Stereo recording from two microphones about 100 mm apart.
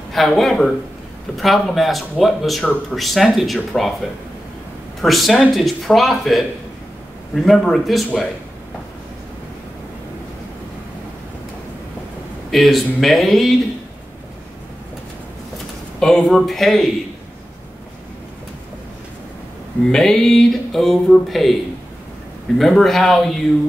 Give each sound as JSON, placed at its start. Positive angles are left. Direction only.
{"t": 0.1, "sound": "speech", "side_deg": 0}
{"t": 5.0, "sound": "speech", "side_deg": 0}
{"t": 7.4, "sound": "speech", "side_deg": 5}
{"t": 12.4, "sound": "speech", "side_deg": 0}
{"t": 16.0, "sound": "speech", "side_deg": 5}
{"t": 19.9, "sound": "speech", "side_deg": 5}
{"t": 22.6, "sound": "speech", "side_deg": 5}